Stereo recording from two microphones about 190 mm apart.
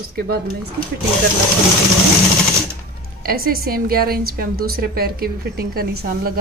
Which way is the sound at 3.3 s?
50° right (ahead or behind).